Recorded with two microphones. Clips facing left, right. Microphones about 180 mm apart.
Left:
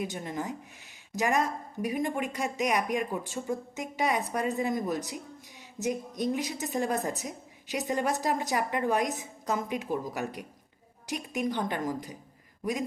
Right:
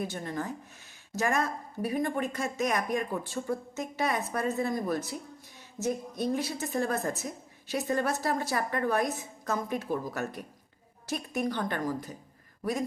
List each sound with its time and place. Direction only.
0.0 s a woman's voice: 15° left (ahead or behind)